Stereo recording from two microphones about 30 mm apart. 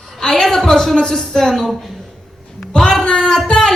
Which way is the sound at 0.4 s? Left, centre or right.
Centre.